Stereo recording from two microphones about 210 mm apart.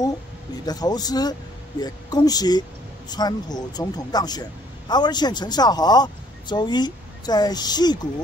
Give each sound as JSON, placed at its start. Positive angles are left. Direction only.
{"t": 0.7, "sound": "speech", "side_deg": 20}